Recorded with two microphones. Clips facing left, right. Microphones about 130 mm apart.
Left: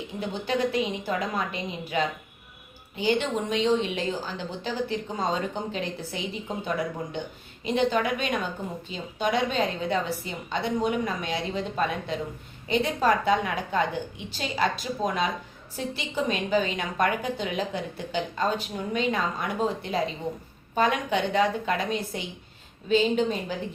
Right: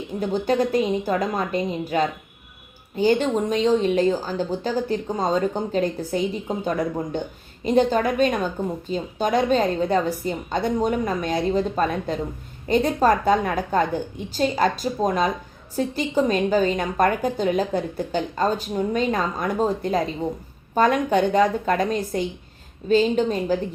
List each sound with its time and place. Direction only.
0.2 s a woman's voice: 40° right (ahead or behind)